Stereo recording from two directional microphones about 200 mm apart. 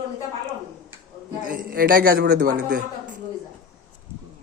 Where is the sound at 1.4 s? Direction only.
45° right (ahead or behind).